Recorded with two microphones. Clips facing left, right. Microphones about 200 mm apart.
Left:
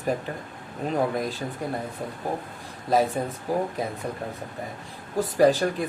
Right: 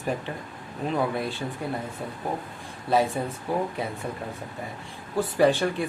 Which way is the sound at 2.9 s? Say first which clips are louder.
Left 1 dB; 40° left (ahead or behind).